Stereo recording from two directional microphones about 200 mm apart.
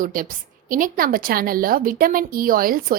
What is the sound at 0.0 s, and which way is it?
A woman's voice, 45° right (ahead or behind).